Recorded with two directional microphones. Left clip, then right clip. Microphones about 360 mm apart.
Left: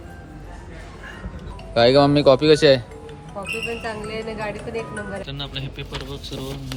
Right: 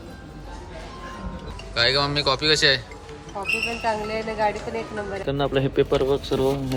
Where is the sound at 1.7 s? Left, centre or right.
Centre.